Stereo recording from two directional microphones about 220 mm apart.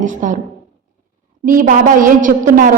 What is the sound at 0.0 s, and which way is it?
Speech, 35° right (ahead or behind).